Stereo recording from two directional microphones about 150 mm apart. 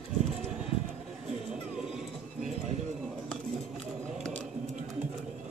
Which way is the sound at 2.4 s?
50° right (ahead or behind).